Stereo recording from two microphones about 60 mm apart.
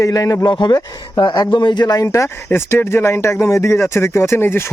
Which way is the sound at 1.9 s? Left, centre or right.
Left.